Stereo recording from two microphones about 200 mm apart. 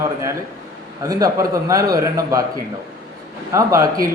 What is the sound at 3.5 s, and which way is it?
Speech, 15° right (ahead or behind).